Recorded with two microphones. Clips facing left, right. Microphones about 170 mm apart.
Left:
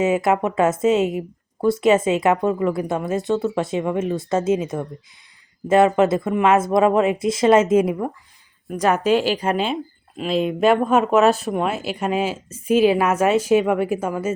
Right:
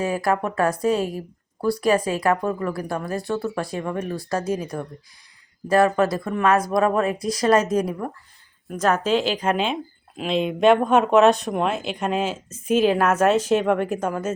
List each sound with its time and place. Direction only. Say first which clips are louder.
0.0 s speech: left 4 dB; 20° left (ahead or behind)